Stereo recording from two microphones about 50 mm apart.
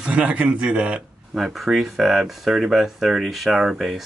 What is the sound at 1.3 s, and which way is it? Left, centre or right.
Speech, centre.